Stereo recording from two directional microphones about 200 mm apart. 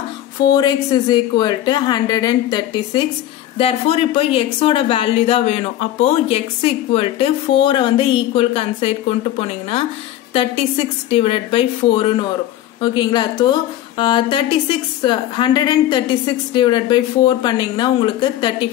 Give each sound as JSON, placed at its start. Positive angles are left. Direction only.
{"t": 0.5, "sound": "speech", "side_deg": 20}